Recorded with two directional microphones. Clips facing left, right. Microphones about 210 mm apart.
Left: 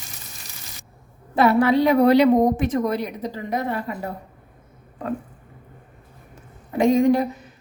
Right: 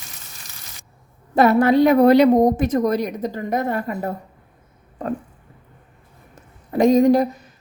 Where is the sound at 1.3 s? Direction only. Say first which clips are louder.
Right 3 dB; 45° right (ahead or behind).